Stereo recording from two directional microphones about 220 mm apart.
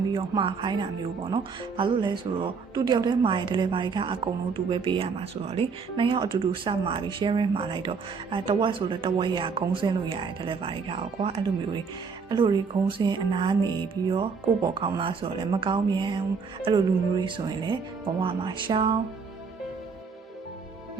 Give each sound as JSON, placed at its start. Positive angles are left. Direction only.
{"t": 0.1, "sound": "speech", "side_deg": -20}